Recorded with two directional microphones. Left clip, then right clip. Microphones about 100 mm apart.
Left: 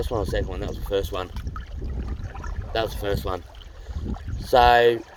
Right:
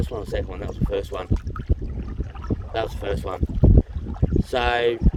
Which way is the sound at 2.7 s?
40° right (ahead or behind).